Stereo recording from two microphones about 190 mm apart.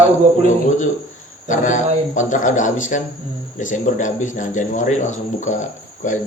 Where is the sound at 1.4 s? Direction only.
40° left (ahead or behind).